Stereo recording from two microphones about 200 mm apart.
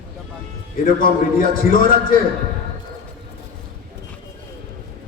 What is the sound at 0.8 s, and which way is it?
A man's voice, 45° left (ahead or behind).